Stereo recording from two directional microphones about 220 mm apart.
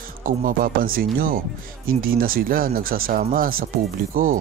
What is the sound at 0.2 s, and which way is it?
Speech, 35° right (ahead or behind).